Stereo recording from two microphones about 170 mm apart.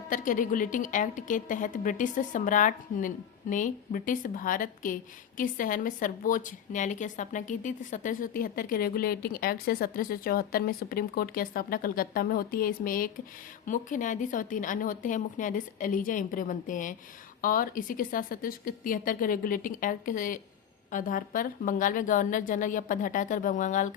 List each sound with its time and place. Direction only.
0.1 s a woman's voice: 50° left (ahead or behind)